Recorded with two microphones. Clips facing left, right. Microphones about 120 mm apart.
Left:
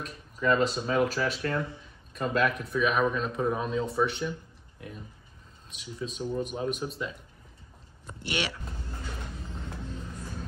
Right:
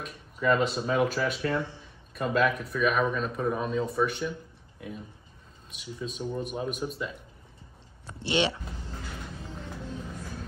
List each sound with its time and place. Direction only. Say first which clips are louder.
0.0 s a man's voice: right 1 dB; 5° right (ahead or behind)
1.6 s speech: even; 30° right (ahead or behind)
2.1 s a man's voice: right 1 dB; centre (ahead or behind)
6.1 s a man's voice: left 1 dB; centre (ahead or behind)
8.2 s speech: right 6 dB; 25° right (ahead or behind)